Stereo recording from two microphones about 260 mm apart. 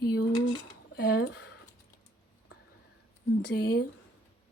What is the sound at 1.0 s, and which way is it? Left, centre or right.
Speech, left.